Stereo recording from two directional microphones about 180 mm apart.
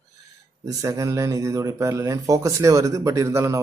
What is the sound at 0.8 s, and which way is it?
Speech, 15° right (ahead or behind).